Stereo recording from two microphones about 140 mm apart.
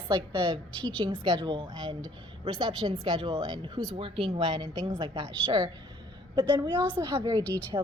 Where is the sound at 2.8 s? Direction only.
40° right (ahead or behind).